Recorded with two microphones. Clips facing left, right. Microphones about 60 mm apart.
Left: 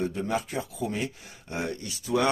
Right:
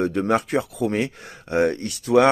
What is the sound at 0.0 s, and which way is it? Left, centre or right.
Speech, right.